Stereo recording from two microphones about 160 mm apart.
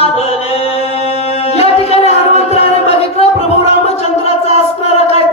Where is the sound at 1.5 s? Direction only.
40° left (ahead or behind).